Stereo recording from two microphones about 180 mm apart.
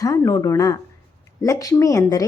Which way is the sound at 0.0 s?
20° left (ahead or behind).